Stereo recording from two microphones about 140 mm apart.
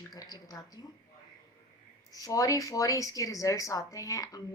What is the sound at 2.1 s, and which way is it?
A woman's voice, 25° left (ahead or behind).